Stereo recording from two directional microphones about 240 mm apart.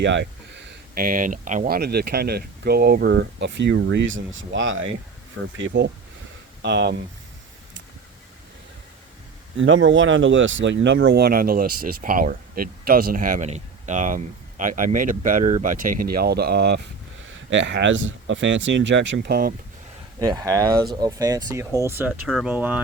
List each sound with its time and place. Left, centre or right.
0.0 s a man's voice: right
9.6 s a man's voice: right
20.1 s speech: centre